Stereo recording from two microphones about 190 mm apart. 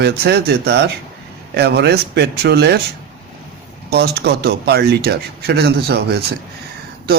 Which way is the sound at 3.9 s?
55° right (ahead or behind).